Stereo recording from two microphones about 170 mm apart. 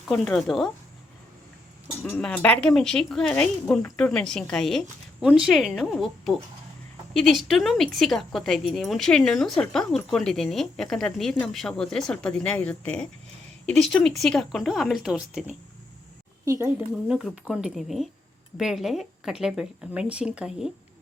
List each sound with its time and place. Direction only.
0.1 s a woman's voice: centre (ahead or behind)
2.0 s a woman's voice: 5° left (ahead or behind)
16.5 s speech: 15° right (ahead or behind)
17.1 s a woman's voice: 5° right (ahead or behind)